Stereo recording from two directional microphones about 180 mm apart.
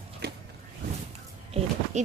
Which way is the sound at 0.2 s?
60° right (ahead or behind).